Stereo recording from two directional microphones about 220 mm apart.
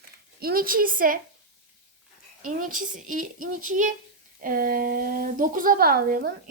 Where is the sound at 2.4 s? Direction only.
40° right (ahead or behind).